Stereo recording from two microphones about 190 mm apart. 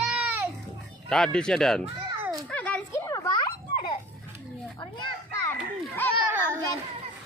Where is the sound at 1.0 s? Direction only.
5° left (ahead or behind).